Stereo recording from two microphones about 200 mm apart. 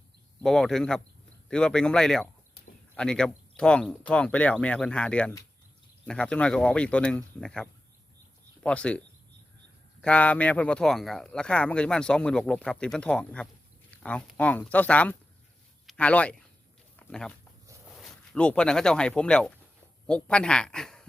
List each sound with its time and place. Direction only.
0.4 s speech: centre (ahead or behind)
17.0 s a sound: 5° left (ahead or behind)
17.8 s speech: centre (ahead or behind)